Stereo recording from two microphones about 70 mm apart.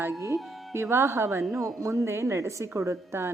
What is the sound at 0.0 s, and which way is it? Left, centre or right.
A woman's voice, right.